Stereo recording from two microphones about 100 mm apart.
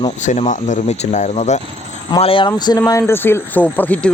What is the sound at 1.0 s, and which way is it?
Speech, 90° left.